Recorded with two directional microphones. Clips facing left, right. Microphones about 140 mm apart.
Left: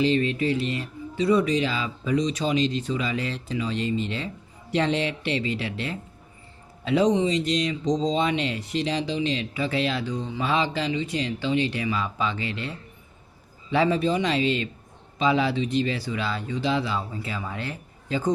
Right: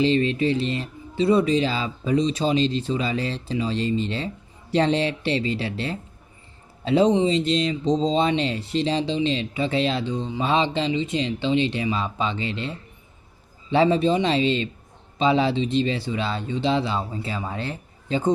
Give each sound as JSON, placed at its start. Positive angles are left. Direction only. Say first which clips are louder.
{"t": 0.0, "sound": "speech", "louder": "right 2 dB", "side_deg": -30}